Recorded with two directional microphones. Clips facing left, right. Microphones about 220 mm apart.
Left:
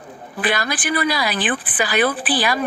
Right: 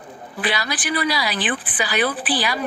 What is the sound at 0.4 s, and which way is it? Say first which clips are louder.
A woman's voice: left 3 dB; 50° left (ahead or behind).